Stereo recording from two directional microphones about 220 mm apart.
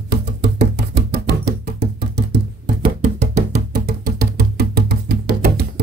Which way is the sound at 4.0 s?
45° right (ahead or behind).